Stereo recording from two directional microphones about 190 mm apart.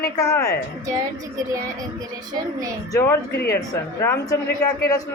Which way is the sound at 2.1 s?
20° right (ahead or behind).